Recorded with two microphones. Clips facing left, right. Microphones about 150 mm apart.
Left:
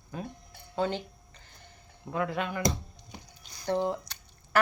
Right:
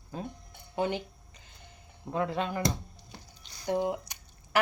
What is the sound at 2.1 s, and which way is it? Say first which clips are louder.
Speech: right 1 dB; 30° right (ahead or behind).